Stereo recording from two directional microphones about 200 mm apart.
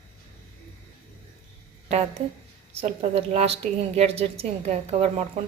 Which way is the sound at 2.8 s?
30° right (ahead or behind).